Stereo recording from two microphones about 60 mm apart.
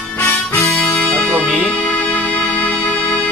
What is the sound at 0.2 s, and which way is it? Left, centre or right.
Music, left.